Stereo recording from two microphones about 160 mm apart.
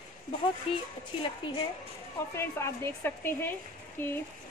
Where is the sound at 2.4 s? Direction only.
15° left (ahead or behind).